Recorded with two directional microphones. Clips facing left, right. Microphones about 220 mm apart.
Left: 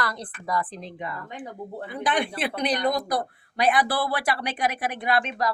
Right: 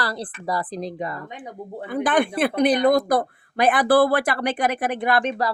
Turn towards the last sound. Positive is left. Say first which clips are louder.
# right 4 dB
turn(degrees=-50)  # may be behind; listen again after turning